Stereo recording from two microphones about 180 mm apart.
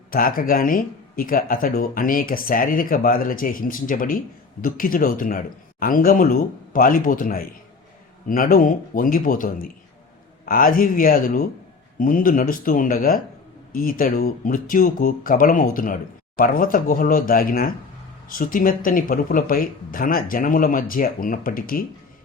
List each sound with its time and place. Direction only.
0.1 s speech: 55° left (ahead or behind)